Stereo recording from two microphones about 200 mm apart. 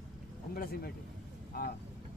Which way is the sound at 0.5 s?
45° left (ahead or behind).